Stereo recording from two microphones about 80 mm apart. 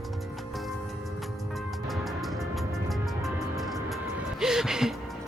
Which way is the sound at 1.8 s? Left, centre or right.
Centre.